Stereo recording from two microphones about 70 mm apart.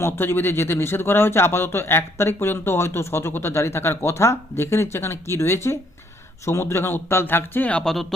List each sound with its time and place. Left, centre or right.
0.0 s speech: left
7.7 s speech: centre